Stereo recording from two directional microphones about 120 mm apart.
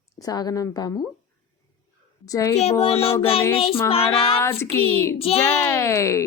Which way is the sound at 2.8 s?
55° left (ahead or behind).